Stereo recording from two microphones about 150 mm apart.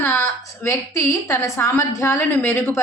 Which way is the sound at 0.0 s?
15° left (ahead or behind).